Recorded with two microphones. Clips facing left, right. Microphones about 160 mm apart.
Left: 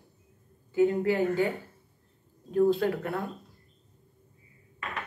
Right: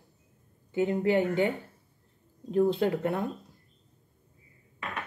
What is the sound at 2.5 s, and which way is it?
Speech, 20° right (ahead or behind).